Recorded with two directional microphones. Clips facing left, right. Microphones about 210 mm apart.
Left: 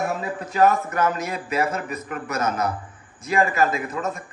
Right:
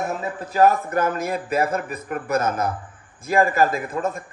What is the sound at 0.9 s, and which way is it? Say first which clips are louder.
A man's voice: right 2 dB; 55° right (ahead or behind).